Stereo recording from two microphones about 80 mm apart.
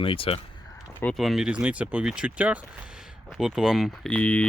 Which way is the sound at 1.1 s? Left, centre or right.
Centre.